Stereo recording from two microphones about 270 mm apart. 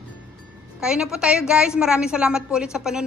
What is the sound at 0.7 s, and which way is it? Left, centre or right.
A woman's voice, centre.